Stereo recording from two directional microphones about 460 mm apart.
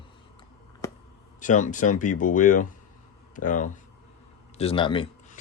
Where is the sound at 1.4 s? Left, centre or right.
Centre.